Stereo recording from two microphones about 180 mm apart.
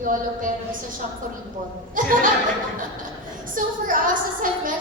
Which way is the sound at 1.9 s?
50° right (ahead or behind).